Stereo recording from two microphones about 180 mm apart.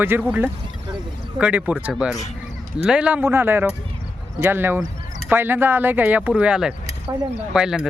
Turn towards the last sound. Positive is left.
turn(degrees=-5)  # may be behind; listen again after turning